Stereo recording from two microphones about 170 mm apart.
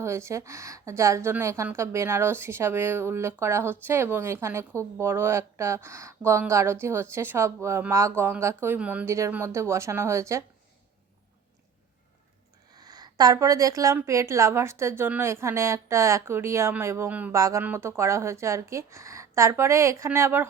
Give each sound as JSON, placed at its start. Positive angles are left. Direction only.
{"t": 0.0, "sound": "a woman's voice", "side_deg": -15}
{"t": 12.7, "sound": "a woman's voice", "side_deg": -25}